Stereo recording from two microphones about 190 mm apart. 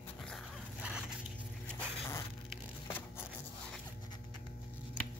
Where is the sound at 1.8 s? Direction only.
15° left (ahead or behind).